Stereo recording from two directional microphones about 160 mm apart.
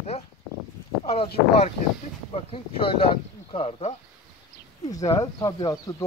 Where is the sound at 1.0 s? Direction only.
40° left (ahead or behind).